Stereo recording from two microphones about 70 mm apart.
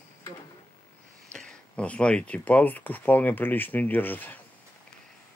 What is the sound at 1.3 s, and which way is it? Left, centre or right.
Speech, centre.